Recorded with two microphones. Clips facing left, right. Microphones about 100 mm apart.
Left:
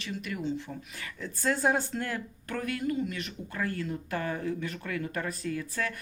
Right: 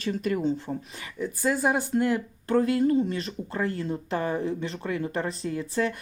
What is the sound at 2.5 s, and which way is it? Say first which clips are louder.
Speech: right 10 dB; 25° right (ahead or behind).